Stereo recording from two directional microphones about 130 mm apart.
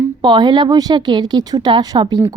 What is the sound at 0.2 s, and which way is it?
Speech, 35° right (ahead or behind).